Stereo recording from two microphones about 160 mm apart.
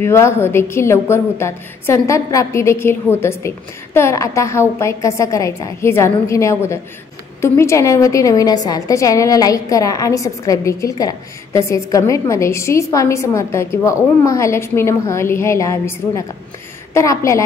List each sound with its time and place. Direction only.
0.0 s a woman's voice: 15° left (ahead or behind)
16.9 s a woman's voice: 20° left (ahead or behind)